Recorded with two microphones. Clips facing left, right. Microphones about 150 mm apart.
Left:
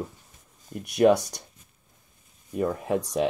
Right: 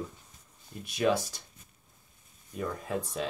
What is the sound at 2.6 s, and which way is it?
Speech, 60° left (ahead or behind).